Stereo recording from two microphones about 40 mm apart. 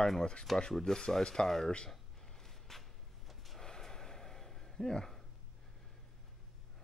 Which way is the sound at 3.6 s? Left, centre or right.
Centre.